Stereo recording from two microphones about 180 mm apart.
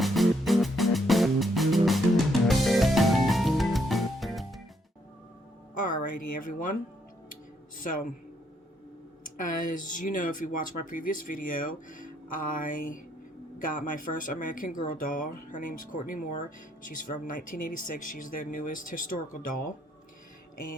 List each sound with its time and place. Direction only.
0.0 s music: centre (ahead or behind)
5.7 s a sound: 50° left (ahead or behind)
6.5 s speech: 45° left (ahead or behind)
7.8 s speech: 50° left (ahead or behind)
9.2 s speech: 50° left (ahead or behind)